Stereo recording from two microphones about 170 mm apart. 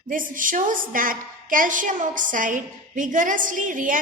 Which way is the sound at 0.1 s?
50° right (ahead or behind).